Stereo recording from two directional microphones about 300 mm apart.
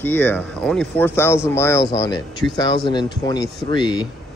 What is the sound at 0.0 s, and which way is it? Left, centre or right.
Speech, centre.